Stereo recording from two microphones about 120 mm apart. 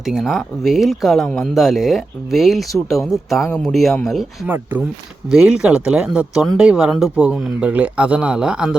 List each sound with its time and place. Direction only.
0.0 s speech: centre (ahead or behind)
4.4 s a man's voice: 15° right (ahead or behind)
5.3 s a man's voice: 5° right (ahead or behind)